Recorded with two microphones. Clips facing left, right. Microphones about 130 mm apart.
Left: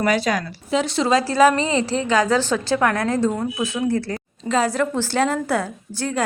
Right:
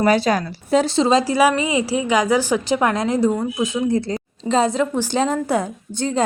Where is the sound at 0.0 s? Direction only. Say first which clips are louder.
Right 3 dB; 30° right (ahead or behind).